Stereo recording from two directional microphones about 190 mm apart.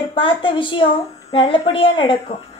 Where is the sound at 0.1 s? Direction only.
25° left (ahead or behind).